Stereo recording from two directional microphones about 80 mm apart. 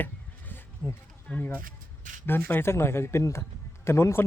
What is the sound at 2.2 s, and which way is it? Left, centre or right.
A man's voice, left.